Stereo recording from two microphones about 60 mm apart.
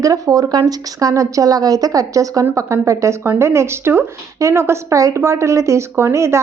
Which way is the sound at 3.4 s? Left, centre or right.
Right.